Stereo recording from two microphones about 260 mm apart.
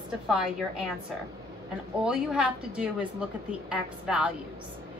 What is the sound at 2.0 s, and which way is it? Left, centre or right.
A woman's voice, centre.